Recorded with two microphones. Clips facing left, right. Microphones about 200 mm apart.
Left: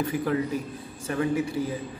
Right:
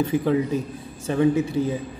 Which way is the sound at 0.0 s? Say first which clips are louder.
Right 5 dB; 25° right (ahead or behind).